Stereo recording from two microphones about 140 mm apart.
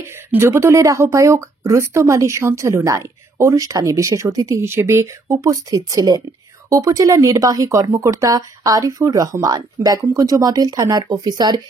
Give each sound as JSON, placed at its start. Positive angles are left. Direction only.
{"t": 0.0, "sound": "speech", "side_deg": -20}